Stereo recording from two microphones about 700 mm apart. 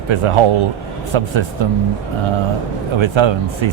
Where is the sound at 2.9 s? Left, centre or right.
Right.